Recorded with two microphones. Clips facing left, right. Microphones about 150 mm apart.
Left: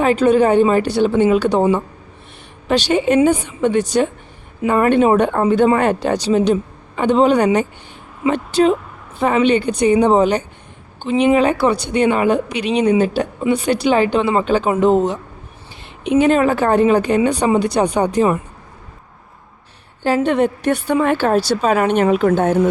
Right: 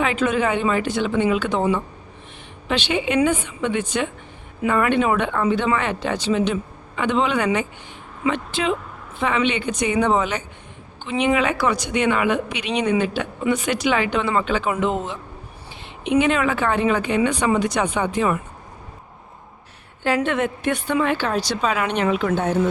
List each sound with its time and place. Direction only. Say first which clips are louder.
0.0 s a woman's voice: left 7 dB; 40° left (ahead or behind)
20.0 s speech: left 5 dB; 35° left (ahead or behind)